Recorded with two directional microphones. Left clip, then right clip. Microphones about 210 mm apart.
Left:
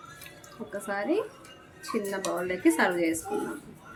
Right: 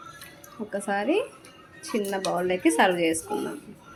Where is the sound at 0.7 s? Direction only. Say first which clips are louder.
Right 4 dB; 25° right (ahead or behind).